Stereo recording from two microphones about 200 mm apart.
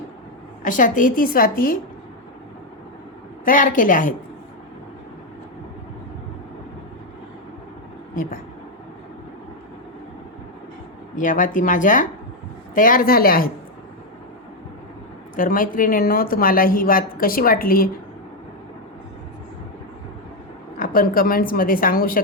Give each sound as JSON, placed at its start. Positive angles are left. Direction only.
{"t": 0.6, "sound": "a woman's voice", "side_deg": 40}
{"t": 3.4, "sound": "speech", "side_deg": 40}
{"t": 8.1, "sound": "a sound", "side_deg": 45}
{"t": 11.2, "sound": "a woman's voice", "side_deg": 40}
{"t": 15.4, "sound": "a woman's voice", "side_deg": 45}
{"t": 20.7, "sound": "a woman's voice", "side_deg": 45}